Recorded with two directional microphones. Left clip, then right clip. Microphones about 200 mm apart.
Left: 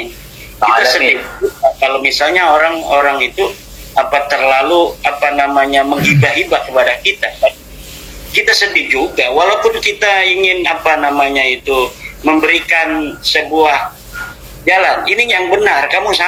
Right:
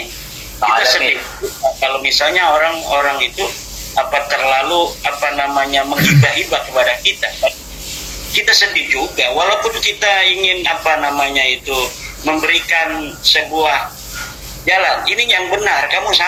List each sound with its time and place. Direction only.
0.6 s speech: 45° left (ahead or behind)